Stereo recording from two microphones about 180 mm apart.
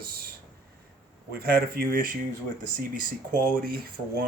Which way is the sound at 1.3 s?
60° right (ahead or behind).